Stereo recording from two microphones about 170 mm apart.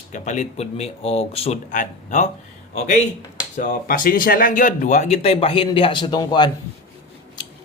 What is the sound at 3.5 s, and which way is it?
Speech, 55° left (ahead or behind).